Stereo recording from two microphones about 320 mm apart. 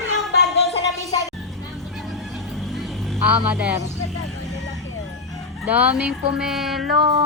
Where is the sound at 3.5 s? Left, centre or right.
Centre.